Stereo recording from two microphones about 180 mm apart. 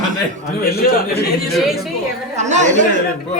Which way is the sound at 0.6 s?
60° left (ahead or behind).